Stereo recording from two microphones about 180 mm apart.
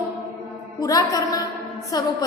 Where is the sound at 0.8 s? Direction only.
20° left (ahead or behind).